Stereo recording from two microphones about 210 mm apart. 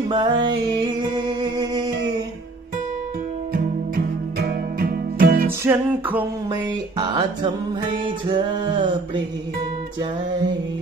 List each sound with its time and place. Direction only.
0.1 s music: 20° right (ahead or behind)
3.5 s music: 50° right (ahead or behind)
5.6 s a sound: 10° right (ahead or behind)